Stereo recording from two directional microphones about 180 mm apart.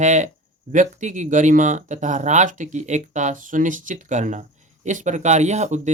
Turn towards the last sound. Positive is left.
turn(degrees=-40)  # may be behind; listen again after turning